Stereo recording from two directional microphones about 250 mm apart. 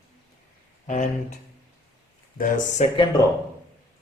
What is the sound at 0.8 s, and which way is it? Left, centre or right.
Speech, left.